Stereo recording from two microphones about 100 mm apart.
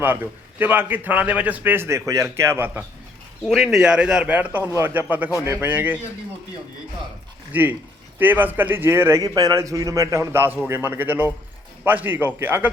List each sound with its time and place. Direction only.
0.6 s a man's voice: 20° right (ahead or behind)
3.4 s speech: centre (ahead or behind); by 6.0 s 15° right (ahead or behind)
7.5 s a man's voice: 20° right (ahead or behind)
9.2 s a man's voice: 40° right (ahead or behind); by 12.7 s 20° right (ahead or behind)